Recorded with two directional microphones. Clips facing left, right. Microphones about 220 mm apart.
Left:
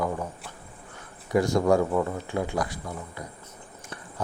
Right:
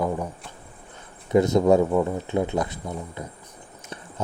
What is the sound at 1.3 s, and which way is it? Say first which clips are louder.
Speech: right 4 dB; 20° right (ahead or behind).